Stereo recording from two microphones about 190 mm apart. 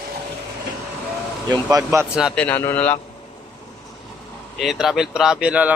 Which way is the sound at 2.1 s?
5° right (ahead or behind).